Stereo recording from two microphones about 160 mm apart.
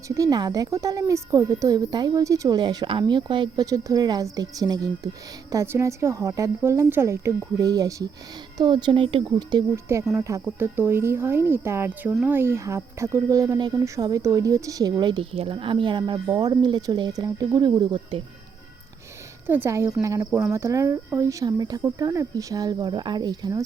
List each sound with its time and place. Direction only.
0.1 s speech: 25° right (ahead or behind)
19.5 s speech: 15° right (ahead or behind)